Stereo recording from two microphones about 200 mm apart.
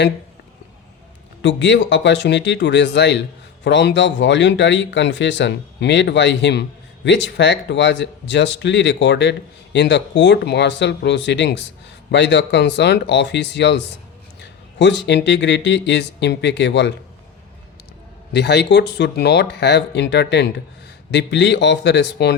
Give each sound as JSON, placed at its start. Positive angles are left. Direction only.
{"t": 1.4, "sound": "speech", "side_deg": 65}
{"t": 18.3, "sound": "speech", "side_deg": 55}